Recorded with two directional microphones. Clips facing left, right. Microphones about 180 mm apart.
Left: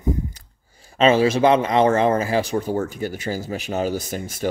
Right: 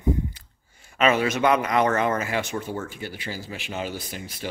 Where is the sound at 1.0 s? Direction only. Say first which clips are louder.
Left 5 dB; 30° left (ahead or behind); by 4.5 s 45° left (ahead or behind).